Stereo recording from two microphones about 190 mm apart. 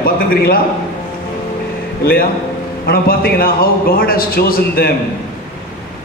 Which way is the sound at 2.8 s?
55° left (ahead or behind).